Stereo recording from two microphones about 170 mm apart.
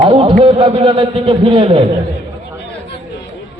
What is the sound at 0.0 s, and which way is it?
A man's voice, 30° right (ahead or behind).